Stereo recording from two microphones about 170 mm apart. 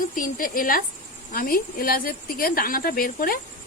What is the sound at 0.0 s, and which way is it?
Speech, 55° left (ahead or behind).